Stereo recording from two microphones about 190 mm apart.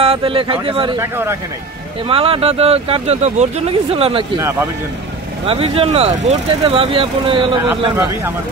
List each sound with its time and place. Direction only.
0.0 s speech: 30° right (ahead or behind)
0.9 s speech: 15° right (ahead or behind)
2.0 s speech: 30° right (ahead or behind)
4.4 s speech: 15° right (ahead or behind)
5.5 s speech: 30° right (ahead or behind)
7.9 s speech: 10° right (ahead or behind)